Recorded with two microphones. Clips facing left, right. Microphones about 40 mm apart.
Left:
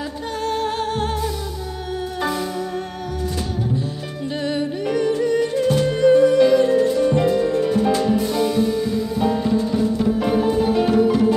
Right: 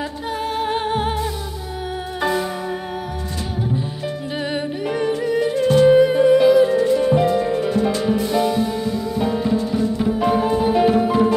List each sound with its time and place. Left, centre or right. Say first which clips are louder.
0.4 s music: even; centre
4.4 s music: left 2 dB; centre
6.5 s music: right 1 dB; centre